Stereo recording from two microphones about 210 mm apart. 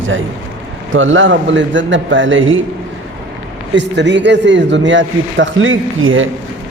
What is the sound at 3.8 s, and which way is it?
A man's voice, 55° right (ahead or behind).